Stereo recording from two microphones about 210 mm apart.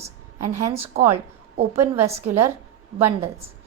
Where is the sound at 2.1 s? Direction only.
30° right (ahead or behind).